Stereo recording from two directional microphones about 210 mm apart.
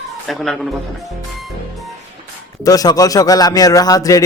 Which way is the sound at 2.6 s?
15° left (ahead or behind).